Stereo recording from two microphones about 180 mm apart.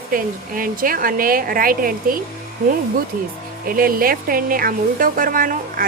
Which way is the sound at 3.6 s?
55° right (ahead or behind).